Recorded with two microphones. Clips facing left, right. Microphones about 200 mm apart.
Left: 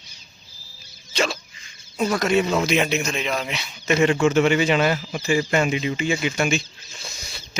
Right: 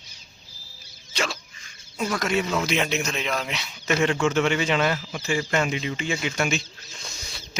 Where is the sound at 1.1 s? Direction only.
25° left (ahead or behind).